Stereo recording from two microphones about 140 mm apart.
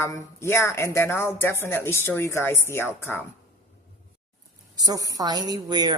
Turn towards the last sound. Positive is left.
turn(degrees=-30)  # may be behind; listen again after turning